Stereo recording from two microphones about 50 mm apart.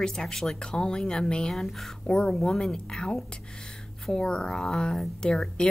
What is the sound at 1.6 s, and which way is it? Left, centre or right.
Speech, centre.